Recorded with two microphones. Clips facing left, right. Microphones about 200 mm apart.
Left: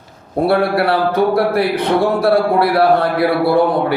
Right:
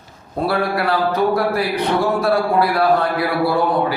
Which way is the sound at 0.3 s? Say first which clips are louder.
Left 5 dB; 60° left (ahead or behind).